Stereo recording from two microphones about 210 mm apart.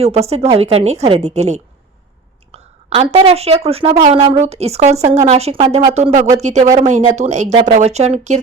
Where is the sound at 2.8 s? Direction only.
30° right (ahead or behind).